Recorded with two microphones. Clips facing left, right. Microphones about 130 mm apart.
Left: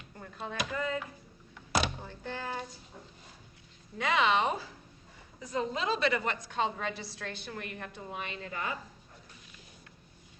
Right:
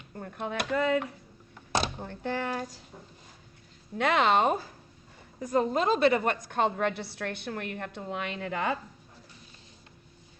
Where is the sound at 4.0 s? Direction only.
60° right (ahead or behind).